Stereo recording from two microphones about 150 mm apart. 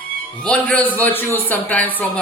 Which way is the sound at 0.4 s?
5° left (ahead or behind).